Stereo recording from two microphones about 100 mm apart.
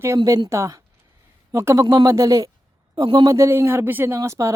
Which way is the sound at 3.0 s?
45° right (ahead or behind).